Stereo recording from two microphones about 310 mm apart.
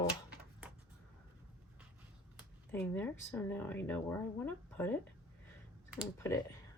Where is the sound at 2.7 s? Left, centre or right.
Centre.